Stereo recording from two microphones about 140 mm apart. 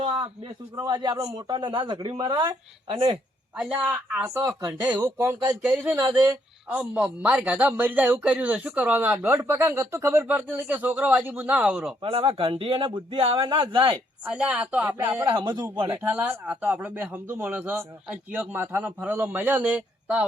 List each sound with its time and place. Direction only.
0.2 s a man's voice: 30° right (ahead or behind)
3.6 s a man's voice: 10° right (ahead or behind)
6.0 s speech: 30° right (ahead or behind)
6.2 s a man's voice: 10° right (ahead or behind)
12.0 s a man's voice: 40° right (ahead or behind)
14.3 s a man's voice: 10° right (ahead or behind)
15.3 s a man's voice: 35° right (ahead or behind)
16.0 s a man's voice: 10° right (ahead or behind)